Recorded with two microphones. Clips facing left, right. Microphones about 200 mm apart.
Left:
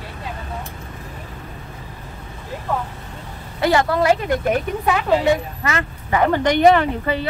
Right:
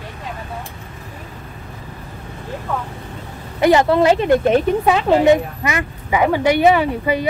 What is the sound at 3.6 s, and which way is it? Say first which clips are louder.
A woman's voice: right 4 dB; 20° right (ahead or behind).